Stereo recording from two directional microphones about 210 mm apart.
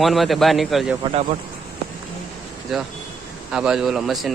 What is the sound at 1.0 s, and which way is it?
Speech, 25° right (ahead or behind).